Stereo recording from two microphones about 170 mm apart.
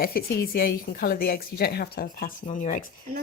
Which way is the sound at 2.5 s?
45° left (ahead or behind).